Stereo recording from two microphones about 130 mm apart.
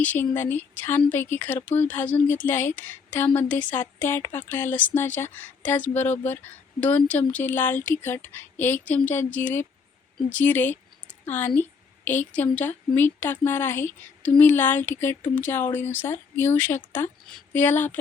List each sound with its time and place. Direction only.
0.0 s a woman's voice: 15° left (ahead or behind)